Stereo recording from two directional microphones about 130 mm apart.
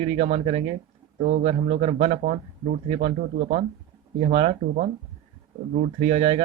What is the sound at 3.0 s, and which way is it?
Speech, 90° right.